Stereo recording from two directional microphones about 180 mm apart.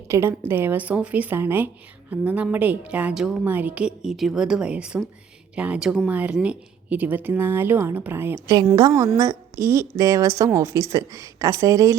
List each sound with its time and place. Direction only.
0.1 s a woman's voice: 15° right (ahead or behind)
8.5 s a woman's voice: 25° right (ahead or behind)